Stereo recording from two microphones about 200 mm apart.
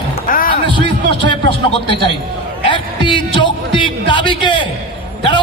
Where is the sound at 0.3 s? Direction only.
45° left (ahead or behind).